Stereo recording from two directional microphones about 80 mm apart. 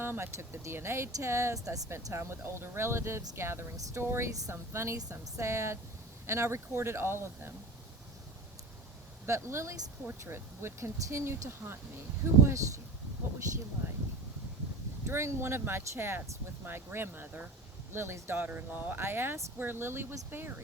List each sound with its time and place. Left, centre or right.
0.0 s speech: right
2.1 s speech: right
9.2 s speech: right
15.0 s speech: right